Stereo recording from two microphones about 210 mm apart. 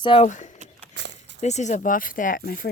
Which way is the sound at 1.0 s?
55° right (ahead or behind).